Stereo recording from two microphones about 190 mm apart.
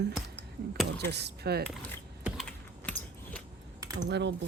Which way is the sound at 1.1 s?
60° right (ahead or behind).